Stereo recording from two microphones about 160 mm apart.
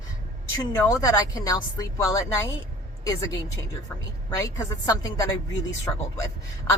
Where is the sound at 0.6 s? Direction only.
20° left (ahead or behind).